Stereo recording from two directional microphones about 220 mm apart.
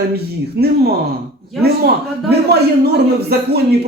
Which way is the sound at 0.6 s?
45° right (ahead or behind).